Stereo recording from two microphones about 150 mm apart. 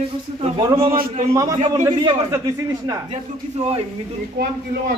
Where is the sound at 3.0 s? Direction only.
45° right (ahead or behind).